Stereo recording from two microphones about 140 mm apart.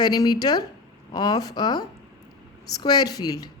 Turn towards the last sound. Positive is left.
turn(degrees=25)  # may be behind; listen again after turning